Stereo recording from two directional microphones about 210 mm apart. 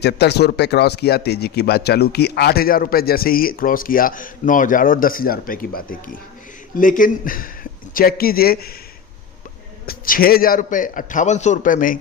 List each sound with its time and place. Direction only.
0.0 s speech: 50° left (ahead or behind)
9.8 s a man's voice: 45° left (ahead or behind)